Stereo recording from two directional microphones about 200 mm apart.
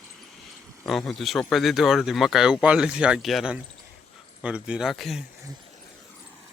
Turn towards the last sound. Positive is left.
turn(degrees=0)  # may be behind; listen again after turning